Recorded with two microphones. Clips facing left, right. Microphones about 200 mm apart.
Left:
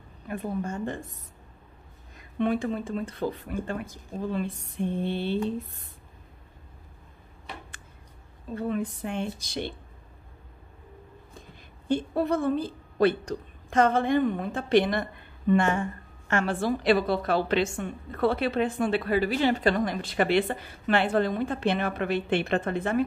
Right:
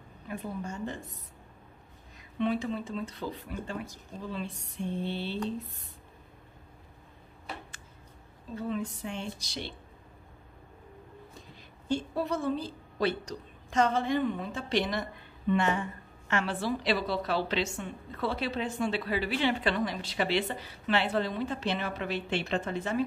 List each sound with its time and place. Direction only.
0.3 s a woman's voice: 55° left (ahead or behind)
2.1 s a woman's voice: 50° left (ahead or behind)
8.5 s a woman's voice: 55° left (ahead or behind)
11.9 s a woman's voice: 55° left (ahead or behind)